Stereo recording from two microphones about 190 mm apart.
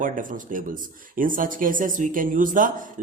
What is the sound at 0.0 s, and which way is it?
Speech, 45° right (ahead or behind).